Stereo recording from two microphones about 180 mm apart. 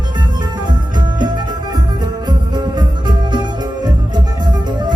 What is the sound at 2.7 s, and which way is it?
Music, 25° right (ahead or behind).